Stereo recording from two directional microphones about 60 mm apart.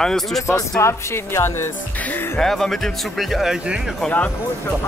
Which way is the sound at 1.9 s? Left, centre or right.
Left.